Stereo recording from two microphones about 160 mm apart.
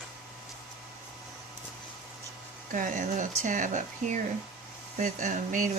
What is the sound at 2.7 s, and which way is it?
Speech, 55° right (ahead or behind).